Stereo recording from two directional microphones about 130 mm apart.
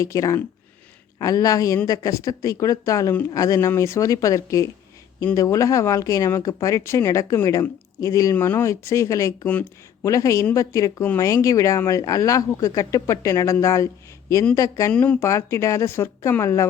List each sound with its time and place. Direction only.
0.0 s speech: 25° left (ahead or behind)
9.5 s speech: 10° left (ahead or behind)
10.1 s speech: 25° left (ahead or behind)
14.9 s speech: 10° left (ahead or behind)
15.3 s speech: 25° left (ahead or behind)